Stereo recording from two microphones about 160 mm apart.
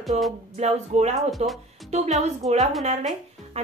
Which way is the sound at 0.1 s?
45° right (ahead or behind).